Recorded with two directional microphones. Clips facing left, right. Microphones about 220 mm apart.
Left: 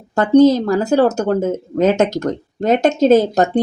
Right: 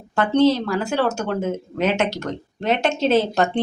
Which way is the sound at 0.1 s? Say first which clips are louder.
Left 6 dB; 40° left (ahead or behind).